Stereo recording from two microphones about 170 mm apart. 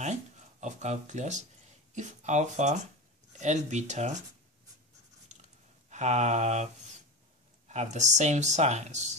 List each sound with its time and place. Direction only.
0.0 s a sound: 45° right (ahead or behind)
2.0 s speech: 45° right (ahead or behind)
5.9 s speech: 45° right (ahead or behind)